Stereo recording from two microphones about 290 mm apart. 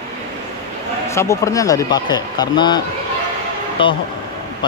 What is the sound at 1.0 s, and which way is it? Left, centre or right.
Speech, centre.